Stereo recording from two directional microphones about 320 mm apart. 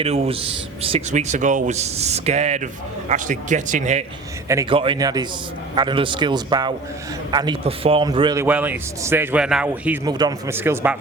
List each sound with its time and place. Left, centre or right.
0.0 s speech: centre
4.4 s a man's voice: centre